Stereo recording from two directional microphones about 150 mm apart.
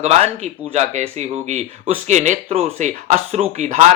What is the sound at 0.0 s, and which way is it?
Speech, 45° right (ahead or behind).